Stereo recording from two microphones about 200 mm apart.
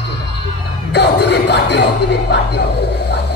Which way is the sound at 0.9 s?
55° left (ahead or behind).